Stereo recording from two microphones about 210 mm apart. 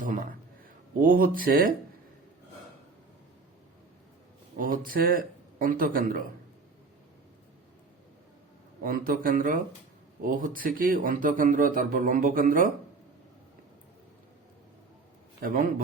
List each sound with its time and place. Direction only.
0.0 s a man's voice: 40° right (ahead or behind)
4.5 s speech: 40° right (ahead or behind)
8.8 s speech: 40° right (ahead or behind)
15.4 s speech: 40° right (ahead or behind)